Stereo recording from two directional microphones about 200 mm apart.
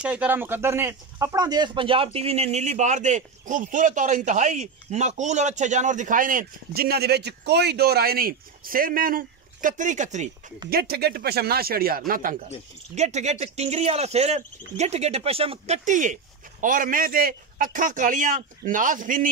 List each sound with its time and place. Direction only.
0.0 s speech: 5° right (ahead or behind); by 10.3 s 35° right (ahead or behind)
10.7 s speech: 50° right (ahead or behind)